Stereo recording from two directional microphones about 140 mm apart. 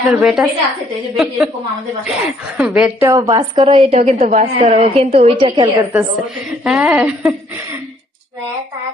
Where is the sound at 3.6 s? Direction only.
45° right (ahead or behind).